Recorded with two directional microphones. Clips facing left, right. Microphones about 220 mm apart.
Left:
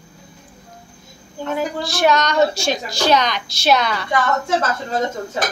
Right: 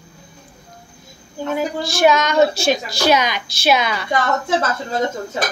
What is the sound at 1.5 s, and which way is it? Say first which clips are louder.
A woman's voice: right 1 dB; centre (ahead or behind).